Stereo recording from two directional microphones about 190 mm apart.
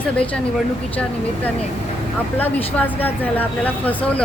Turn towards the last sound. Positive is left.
turn(degrees=5)  # may be behind; listen again after turning